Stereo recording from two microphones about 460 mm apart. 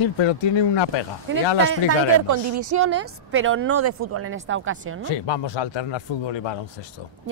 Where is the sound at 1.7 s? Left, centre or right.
Right.